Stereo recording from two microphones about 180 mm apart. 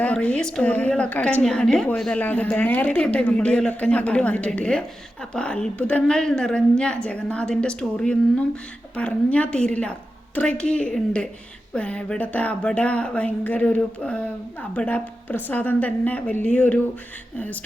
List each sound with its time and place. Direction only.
0.0 s a woman's voice: 5° left (ahead or behind)